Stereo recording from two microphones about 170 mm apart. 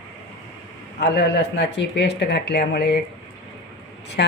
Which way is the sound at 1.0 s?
90° left.